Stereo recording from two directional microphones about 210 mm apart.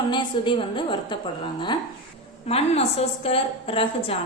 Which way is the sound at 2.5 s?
30° left (ahead or behind).